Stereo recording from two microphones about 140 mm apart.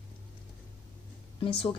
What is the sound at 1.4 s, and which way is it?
Speech, 40° left (ahead or behind).